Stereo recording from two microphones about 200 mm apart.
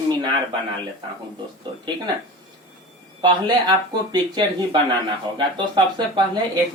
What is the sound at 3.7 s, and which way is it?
Speech, 20° right (ahead or behind).